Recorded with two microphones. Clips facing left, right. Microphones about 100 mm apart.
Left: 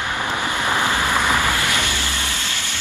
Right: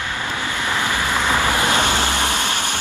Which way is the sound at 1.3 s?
20° right (ahead or behind).